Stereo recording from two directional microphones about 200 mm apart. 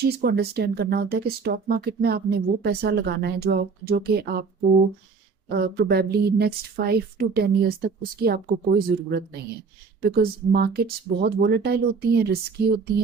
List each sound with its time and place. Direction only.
0.0 s speech: 50° right (ahead or behind)
5.5 s speech: 50° right (ahead or behind)